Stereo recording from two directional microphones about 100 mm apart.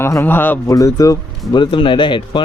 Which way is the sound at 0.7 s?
35° left (ahead or behind).